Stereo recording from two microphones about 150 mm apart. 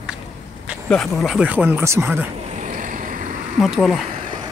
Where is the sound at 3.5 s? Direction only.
Centre (ahead or behind).